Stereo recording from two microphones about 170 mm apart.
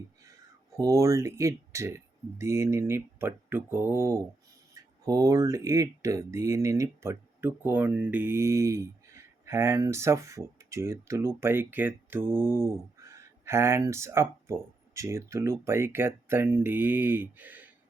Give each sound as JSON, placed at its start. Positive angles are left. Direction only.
{"t": 0.8, "sound": "speech", "side_deg": -20}